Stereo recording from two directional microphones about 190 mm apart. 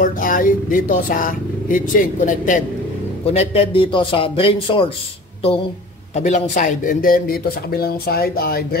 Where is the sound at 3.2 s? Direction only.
30° left (ahead or behind).